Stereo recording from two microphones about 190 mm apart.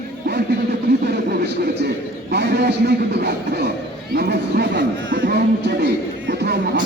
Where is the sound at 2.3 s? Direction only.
60° right (ahead or behind).